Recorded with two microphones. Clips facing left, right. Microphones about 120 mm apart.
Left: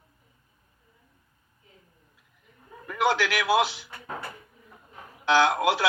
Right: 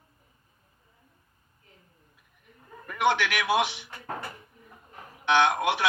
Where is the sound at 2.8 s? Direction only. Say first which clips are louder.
Even; 90° left.